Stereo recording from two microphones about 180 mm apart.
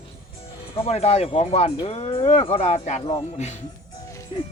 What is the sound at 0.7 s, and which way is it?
Speech, 35° left (ahead or behind).